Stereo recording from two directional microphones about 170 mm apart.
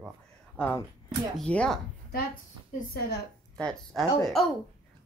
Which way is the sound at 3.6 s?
5° left (ahead or behind).